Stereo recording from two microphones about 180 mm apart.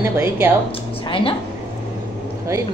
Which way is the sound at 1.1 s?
30° left (ahead or behind).